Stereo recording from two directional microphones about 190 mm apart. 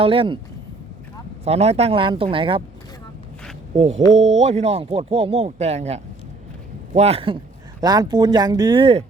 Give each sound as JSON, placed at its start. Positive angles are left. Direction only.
{"t": 0.0, "sound": "speech", "side_deg": -30}
{"t": 1.5, "sound": "speech", "side_deg": -35}
{"t": 3.8, "sound": "speech", "side_deg": -35}